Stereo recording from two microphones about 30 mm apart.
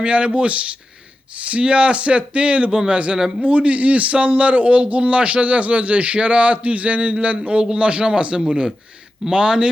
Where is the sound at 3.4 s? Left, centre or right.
Right.